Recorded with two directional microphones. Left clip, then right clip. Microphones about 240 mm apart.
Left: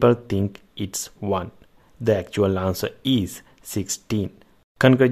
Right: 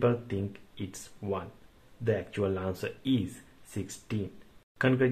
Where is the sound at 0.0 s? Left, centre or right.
Left.